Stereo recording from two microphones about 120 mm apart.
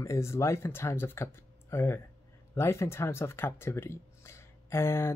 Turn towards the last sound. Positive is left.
turn(degrees=20)  # may be behind; listen again after turning